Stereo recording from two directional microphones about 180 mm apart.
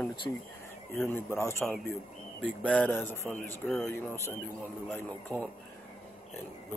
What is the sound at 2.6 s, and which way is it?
Speech, 5° left (ahead or behind).